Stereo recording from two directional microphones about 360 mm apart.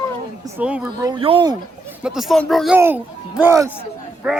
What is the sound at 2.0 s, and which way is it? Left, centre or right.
Speech, centre.